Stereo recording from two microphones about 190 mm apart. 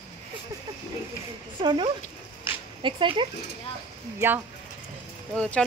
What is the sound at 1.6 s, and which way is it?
Speech, 25° right (ahead or behind).